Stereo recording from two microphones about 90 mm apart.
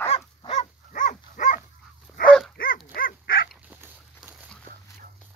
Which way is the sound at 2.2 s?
5° left (ahead or behind).